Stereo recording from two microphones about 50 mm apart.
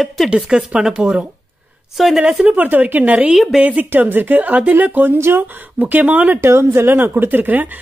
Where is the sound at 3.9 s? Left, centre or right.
Right.